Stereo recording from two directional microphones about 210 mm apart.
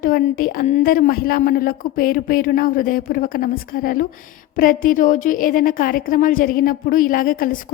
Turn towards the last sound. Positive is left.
turn(degrees=40)  # may be behind; listen again after turning